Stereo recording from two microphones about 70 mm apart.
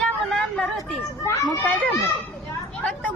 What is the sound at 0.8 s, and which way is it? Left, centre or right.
Speech, left.